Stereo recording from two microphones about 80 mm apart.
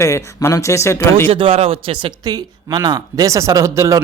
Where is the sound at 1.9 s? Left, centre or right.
Right.